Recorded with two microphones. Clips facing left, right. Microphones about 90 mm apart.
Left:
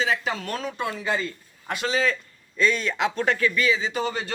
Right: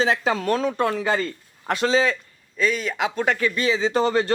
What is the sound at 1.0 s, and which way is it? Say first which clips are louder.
Speech: right 4 dB; 55° right (ahead or behind).